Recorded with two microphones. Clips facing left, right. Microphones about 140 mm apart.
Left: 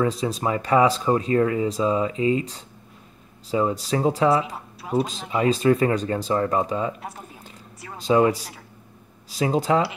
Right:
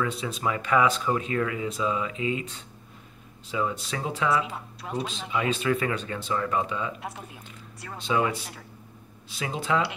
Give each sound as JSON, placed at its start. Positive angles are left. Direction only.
{"t": 0.0, "sound": "speech", "side_deg": 35}
{"t": 7.0, "sound": "speech", "side_deg": 0}
{"t": 8.0, "sound": "speech", "side_deg": 40}